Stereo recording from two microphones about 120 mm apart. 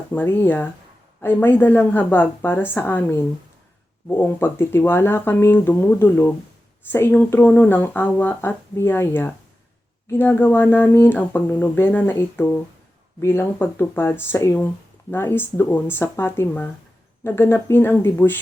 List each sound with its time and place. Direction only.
0.1 s speech: 15° left (ahead or behind)